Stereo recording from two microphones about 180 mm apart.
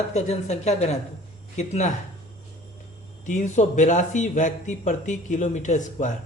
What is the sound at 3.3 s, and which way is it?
Speech, 40° left (ahead or behind).